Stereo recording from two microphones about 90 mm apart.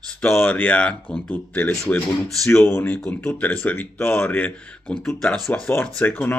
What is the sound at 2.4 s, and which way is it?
Speech, 25° left (ahead or behind).